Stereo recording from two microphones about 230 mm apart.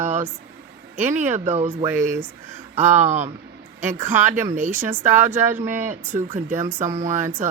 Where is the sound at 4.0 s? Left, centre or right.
Centre.